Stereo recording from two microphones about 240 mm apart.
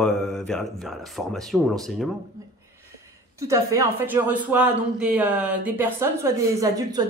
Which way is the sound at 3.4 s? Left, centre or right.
Centre.